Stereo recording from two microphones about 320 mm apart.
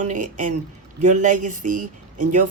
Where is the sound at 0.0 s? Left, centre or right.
Right.